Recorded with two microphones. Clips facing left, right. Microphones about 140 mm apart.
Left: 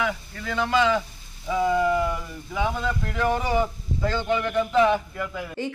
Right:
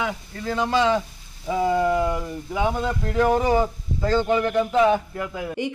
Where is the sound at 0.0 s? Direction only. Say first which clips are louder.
Right 1 dB; 30° right (ahead or behind).